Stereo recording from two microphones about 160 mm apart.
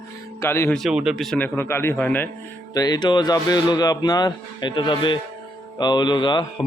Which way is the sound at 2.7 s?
25° left (ahead or behind).